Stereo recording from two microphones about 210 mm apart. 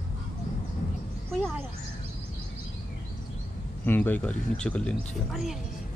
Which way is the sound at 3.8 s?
10° left (ahead or behind).